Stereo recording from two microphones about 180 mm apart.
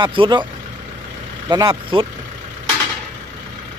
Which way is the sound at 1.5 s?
25° right (ahead or behind).